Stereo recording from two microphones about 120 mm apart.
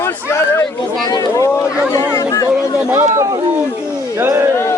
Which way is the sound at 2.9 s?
25° right (ahead or behind).